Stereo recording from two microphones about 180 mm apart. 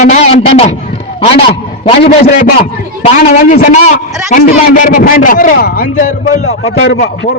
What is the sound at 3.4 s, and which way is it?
A man's voice, 45° left (ahead or behind).